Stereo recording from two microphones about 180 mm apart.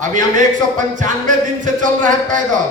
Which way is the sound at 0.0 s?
45° right (ahead or behind).